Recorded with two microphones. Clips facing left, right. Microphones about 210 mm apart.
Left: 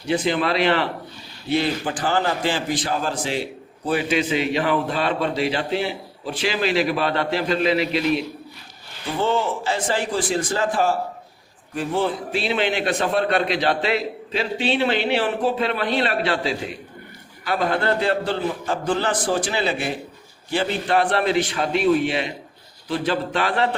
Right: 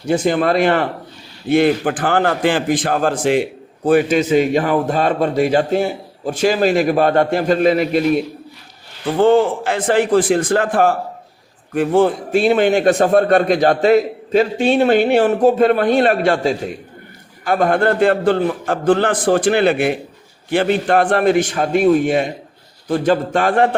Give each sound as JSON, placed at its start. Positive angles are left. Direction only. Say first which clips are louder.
{"t": 0.1, "sound": "a man's voice", "louder": "right 6 dB", "side_deg": -45}